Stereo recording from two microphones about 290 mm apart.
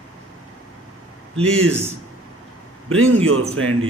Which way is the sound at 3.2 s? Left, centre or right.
Right.